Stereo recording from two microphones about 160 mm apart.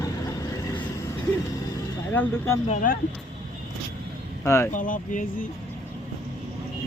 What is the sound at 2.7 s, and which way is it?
Speech, 55° left (ahead or behind).